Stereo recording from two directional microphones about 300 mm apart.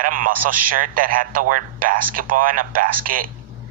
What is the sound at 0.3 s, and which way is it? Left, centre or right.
Speech, right.